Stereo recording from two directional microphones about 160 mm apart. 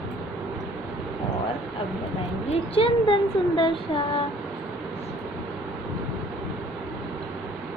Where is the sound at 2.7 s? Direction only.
35° left (ahead or behind).